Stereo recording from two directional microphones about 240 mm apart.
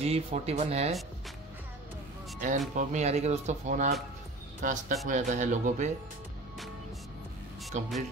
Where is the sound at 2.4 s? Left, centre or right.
Right.